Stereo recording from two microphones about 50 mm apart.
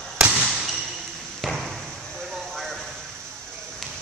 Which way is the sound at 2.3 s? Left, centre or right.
Centre.